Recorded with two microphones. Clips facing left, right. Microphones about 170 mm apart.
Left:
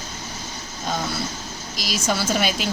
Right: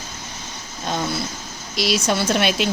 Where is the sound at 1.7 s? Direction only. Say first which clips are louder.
Right 8 dB; 65° right (ahead or behind).